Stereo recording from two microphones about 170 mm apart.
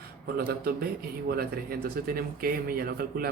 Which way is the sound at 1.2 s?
65° right (ahead or behind).